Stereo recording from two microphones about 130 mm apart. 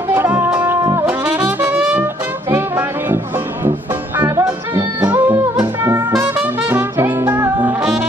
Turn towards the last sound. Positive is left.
turn(degrees=-15)  # may be behind; listen again after turning